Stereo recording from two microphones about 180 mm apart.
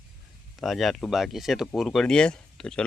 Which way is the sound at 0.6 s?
Centre (ahead or behind).